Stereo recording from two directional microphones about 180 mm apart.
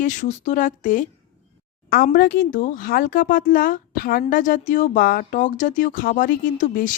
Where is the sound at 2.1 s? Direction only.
50° left (ahead or behind).